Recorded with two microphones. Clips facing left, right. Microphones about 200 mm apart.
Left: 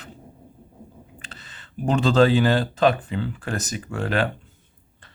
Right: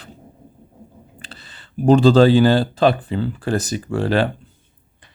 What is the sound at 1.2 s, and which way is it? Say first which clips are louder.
Speech: right 2 dB; 35° right (ahead or behind).